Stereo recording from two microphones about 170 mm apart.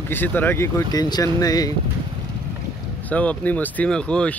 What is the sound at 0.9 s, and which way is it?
Speech, 25° left (ahead or behind).